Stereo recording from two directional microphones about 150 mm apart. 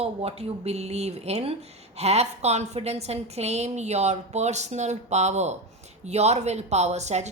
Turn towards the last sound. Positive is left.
turn(degrees=-50)  # may be behind; listen again after turning